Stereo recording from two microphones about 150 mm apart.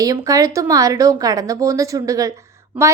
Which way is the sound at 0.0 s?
20° right (ahead or behind).